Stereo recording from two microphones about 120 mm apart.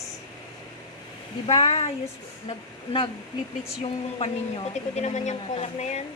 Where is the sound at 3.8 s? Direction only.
55° left (ahead or behind).